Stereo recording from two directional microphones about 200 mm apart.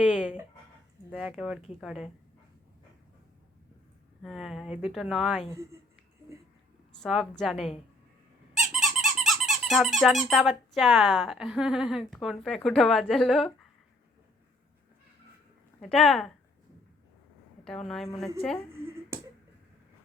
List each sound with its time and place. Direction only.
0.0 s speech: 5° right (ahead or behind)
4.2 s speech: centre (ahead or behind)
7.0 s speech: centre (ahead or behind)
8.7 s squeak: centre (ahead or behind)
15.8 s speech: centre (ahead or behind)
17.7 s speech: centre (ahead or behind)
18.7 s finger snapping: 10° right (ahead or behind)